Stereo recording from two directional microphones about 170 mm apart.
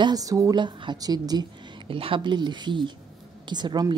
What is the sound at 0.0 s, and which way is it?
A woman's voice, 20° right (ahead or behind).